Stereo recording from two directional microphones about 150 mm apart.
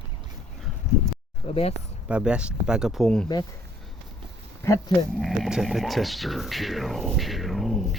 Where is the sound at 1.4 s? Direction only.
40° left (ahead or behind).